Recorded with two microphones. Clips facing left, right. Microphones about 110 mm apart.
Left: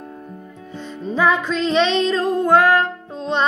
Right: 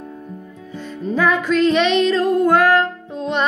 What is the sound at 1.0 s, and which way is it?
Music, 20° left (ahead or behind).